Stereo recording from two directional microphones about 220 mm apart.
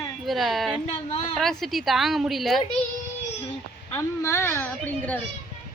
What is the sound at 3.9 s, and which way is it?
A woman's voice, 10° left (ahead or behind).